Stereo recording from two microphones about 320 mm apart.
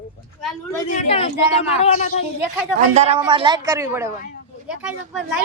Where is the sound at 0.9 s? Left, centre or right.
Centre.